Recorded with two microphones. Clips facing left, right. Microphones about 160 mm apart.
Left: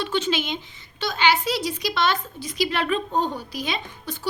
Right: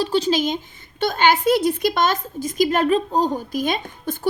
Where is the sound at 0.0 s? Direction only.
35° right (ahead or behind).